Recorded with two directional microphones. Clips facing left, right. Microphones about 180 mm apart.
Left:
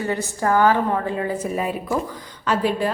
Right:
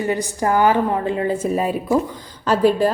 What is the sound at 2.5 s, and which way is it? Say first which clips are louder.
Speech: right 5 dB; 40° right (ahead or behind).